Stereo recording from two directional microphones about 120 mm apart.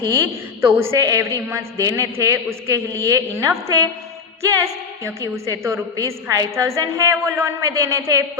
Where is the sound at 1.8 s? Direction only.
30° right (ahead or behind).